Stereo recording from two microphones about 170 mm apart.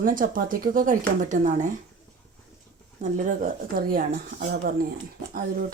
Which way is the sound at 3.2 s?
50° right (ahead or behind).